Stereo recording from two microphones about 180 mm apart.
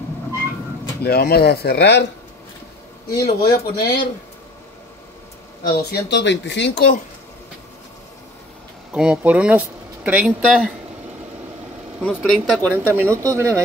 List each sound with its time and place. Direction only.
1.0 s speech: 60° left (ahead or behind)
3.1 s speech: 20° left (ahead or behind)
5.7 s speech: 65° left (ahead or behind)
8.9 s speech: 5° right (ahead or behind)
12.0 s speech: 5° right (ahead or behind)
12.7 s speech: 15° right (ahead or behind)